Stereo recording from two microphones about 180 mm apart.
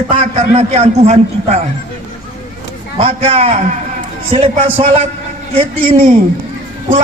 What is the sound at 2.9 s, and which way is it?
A man's voice, 35° right (ahead or behind).